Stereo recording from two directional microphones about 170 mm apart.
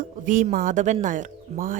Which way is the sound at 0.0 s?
50° right (ahead or behind).